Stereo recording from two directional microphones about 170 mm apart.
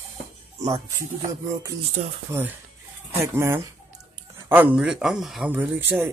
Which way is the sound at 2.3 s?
15° right (ahead or behind).